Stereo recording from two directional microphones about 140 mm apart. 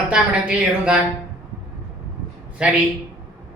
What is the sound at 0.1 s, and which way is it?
Speech, 5° right (ahead or behind).